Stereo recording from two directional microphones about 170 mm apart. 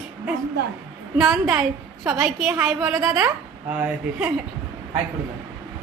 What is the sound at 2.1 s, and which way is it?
Speech, 5° right (ahead or behind).